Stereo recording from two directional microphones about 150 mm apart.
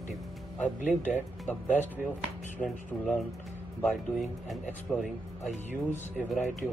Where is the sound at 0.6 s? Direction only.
55° left (ahead or behind).